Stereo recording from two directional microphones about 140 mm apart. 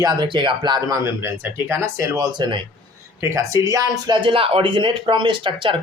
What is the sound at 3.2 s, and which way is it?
Speech, 20° right (ahead or behind).